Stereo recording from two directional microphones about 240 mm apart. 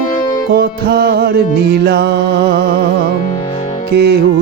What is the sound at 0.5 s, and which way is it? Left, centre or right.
Music, right.